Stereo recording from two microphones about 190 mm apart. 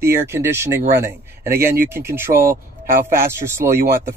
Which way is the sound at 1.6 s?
50° right (ahead or behind).